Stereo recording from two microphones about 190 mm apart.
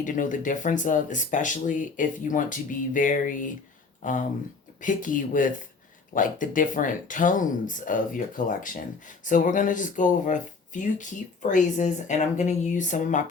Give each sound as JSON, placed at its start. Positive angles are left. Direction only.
{"t": 0.0, "sound": "speech", "side_deg": 45}